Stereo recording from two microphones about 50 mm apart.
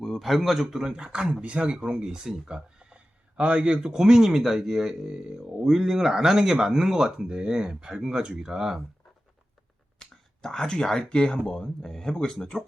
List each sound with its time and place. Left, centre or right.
0.0 s a man's voice: centre; by 3.8 s right
3.8 s speech: centre
10.1 s speech: centre